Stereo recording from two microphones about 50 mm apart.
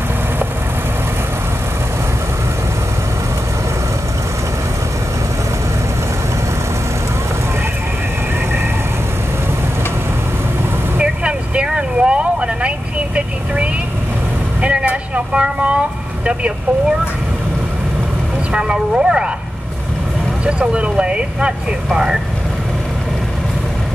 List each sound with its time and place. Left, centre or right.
11.0 s vehicle: right
15.4 s a sound: right
18.5 s vehicle: centre
20.4 s vehicle: right